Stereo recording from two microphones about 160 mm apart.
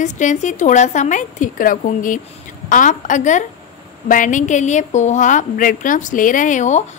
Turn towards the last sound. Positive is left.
turn(degrees=50)  # may be behind; listen again after turning